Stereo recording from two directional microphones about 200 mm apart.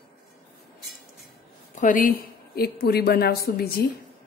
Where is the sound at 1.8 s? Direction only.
40° left (ahead or behind).